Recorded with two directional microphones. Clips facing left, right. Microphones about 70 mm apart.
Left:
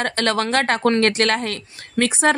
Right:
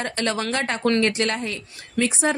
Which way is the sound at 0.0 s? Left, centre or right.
Left.